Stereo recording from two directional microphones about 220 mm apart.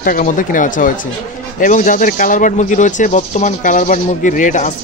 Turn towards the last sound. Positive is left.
turn(degrees=35)  # may be behind; listen again after turning